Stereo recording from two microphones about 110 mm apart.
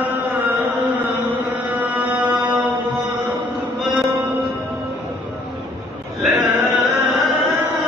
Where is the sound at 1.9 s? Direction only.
15° right (ahead or behind).